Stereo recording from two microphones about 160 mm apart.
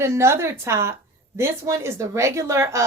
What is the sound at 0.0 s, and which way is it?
A woman's voice, 15° right (ahead or behind).